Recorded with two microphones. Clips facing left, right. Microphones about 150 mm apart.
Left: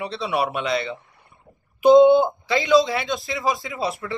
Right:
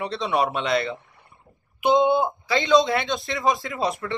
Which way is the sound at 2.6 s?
5° left (ahead or behind).